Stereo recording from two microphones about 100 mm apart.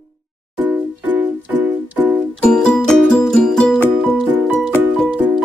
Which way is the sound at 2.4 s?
10° left (ahead or behind).